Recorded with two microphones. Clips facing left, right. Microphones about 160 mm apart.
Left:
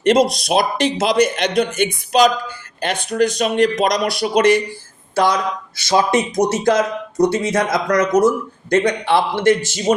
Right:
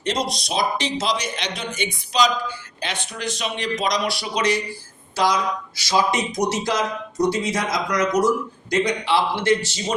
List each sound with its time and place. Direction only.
0.0 s a man's voice: 50° left (ahead or behind)